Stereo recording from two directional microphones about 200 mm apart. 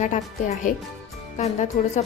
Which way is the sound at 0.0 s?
40° left (ahead or behind).